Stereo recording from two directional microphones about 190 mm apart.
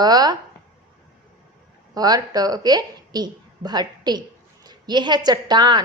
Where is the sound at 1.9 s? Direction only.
20° right (ahead or behind).